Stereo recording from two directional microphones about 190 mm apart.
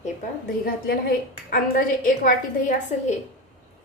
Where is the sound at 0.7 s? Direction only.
50° left (ahead or behind).